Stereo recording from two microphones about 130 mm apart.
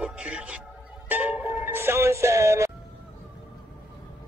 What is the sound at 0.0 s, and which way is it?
Music, 10° right (ahead or behind).